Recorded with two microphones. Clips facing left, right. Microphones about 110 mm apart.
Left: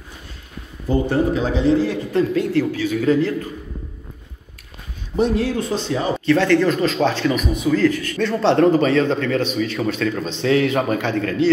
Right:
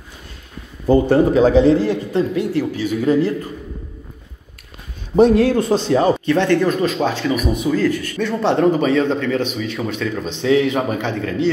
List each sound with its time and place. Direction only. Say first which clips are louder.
0.8 s speech: right 5 dB; 55° right (ahead or behind)
1.9 s a man's voice: right 1 dB; 20° right (ahead or behind)
5.1 s speech: right 7 dB; 60° right (ahead or behind)
6.2 s a man's voice: even; 15° right (ahead or behind)